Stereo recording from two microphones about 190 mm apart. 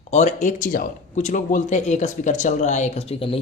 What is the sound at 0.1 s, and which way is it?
Speech, 40° left (ahead or behind).